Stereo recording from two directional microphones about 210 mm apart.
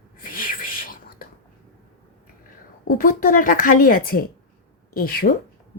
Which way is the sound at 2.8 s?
40° left (ahead or behind).